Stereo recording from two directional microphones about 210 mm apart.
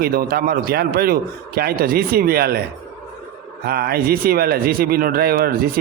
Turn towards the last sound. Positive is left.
turn(degrees=-45)  # may be behind; listen again after turning